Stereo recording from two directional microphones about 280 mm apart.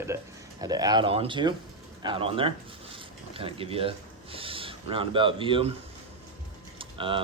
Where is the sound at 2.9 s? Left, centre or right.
Centre.